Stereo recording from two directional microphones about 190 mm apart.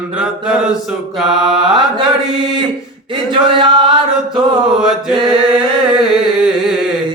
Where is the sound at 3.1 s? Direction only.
25° right (ahead or behind).